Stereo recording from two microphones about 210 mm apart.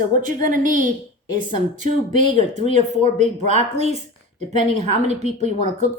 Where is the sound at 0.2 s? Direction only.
40° right (ahead or behind).